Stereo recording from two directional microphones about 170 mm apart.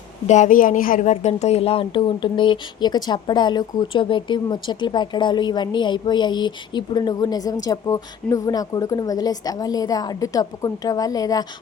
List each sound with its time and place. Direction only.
0.3 s a woman's voice: 45° left (ahead or behind); by 11.4 s 20° left (ahead or behind)